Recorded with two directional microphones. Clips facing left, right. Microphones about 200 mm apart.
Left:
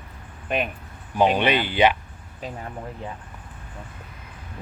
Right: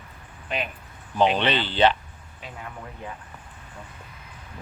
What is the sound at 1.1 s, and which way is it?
Speech, 10° left (ahead or behind).